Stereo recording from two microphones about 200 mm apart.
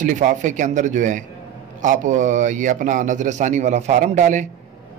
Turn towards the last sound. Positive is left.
turn(degrees=-40)  # may be behind; listen again after turning